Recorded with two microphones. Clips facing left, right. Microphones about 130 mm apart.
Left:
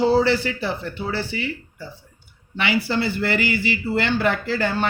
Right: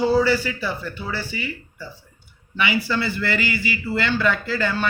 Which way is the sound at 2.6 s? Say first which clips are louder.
Left 1 dB; 65° left (ahead or behind).